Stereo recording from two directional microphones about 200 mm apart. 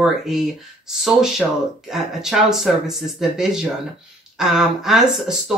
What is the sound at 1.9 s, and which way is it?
Speech, centre (ahead or behind).